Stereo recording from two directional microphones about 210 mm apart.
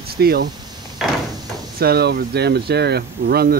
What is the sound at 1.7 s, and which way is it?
Speech, 50° right (ahead or behind).